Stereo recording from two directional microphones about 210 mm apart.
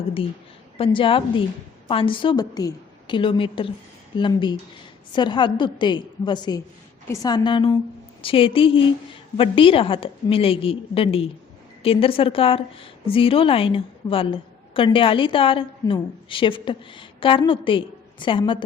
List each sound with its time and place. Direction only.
0.9 s a woman's voice: 25° left (ahead or behind)